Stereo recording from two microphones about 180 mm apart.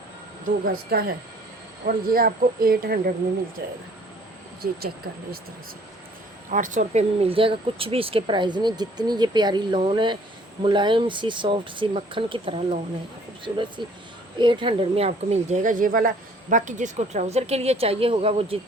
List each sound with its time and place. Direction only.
0.4 s speech: 50° right (ahead or behind)
4.6 s speech: 50° right (ahead or behind)
6.5 s speech: 45° right (ahead or behind)